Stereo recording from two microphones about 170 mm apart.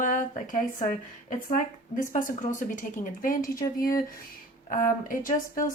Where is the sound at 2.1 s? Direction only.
50° left (ahead or behind).